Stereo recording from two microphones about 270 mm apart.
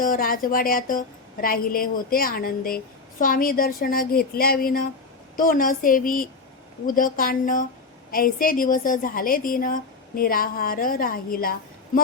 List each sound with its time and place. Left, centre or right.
0.0 s a woman's voice: left